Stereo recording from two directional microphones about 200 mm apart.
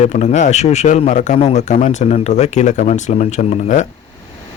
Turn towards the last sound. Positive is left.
turn(degrees=35)  # may be behind; listen again after turning